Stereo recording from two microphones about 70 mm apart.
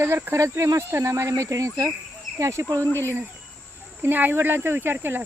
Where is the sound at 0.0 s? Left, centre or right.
Right.